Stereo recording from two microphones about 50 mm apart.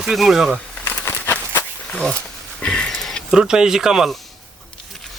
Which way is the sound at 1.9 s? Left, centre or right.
Left.